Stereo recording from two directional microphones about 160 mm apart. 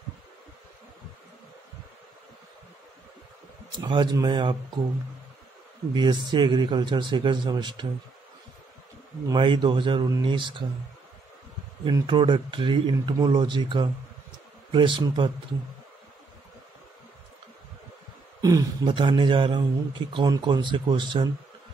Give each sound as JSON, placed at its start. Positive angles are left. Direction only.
{"t": 3.8, "sound": "speech", "side_deg": -25}
{"t": 5.9, "sound": "speech", "side_deg": -30}
{"t": 9.3, "sound": "speech", "side_deg": -30}
{"t": 11.8, "sound": "speech", "side_deg": -30}
{"t": 18.4, "sound": "speech", "side_deg": -20}